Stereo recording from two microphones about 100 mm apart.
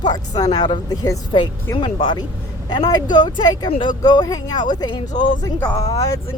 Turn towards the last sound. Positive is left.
turn(degrees=35)  # may be behind; listen again after turning